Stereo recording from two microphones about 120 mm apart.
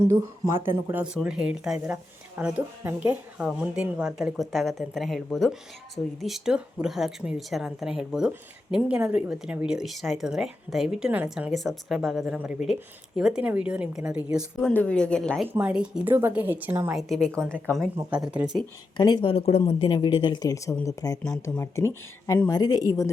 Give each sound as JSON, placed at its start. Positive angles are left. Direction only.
{"t": 0.0, "sound": "speech", "side_deg": -20}
{"t": 0.9, "sound": "a woman's voice", "side_deg": -10}
{"t": 11.5, "sound": "a woman's voice", "side_deg": 0}
{"t": 14.7, "sound": "speech", "side_deg": 10}
{"t": 15.4, "sound": "a woman's voice", "side_deg": -15}
{"t": 16.9, "sound": "speech", "side_deg": 0}
{"t": 18.1, "sound": "a woman's voice", "side_deg": -10}
{"t": 18.9, "sound": "a woman's voice", "side_deg": 35}
{"t": 19.2, "sound": "a woman's voice", "side_deg": 55}